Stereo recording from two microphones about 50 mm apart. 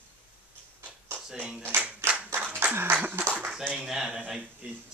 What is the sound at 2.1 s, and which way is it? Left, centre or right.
Clapping, right.